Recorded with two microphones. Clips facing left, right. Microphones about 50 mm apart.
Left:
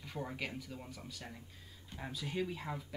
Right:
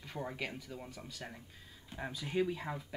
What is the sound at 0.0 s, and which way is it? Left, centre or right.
Speech, centre.